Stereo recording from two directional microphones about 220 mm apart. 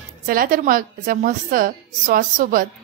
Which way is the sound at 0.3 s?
40° right (ahead or behind).